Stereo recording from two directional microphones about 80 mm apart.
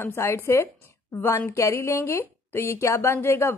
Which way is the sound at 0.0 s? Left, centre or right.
Left.